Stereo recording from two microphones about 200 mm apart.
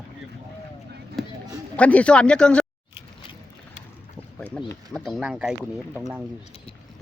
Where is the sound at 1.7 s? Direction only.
5° left (ahead or behind).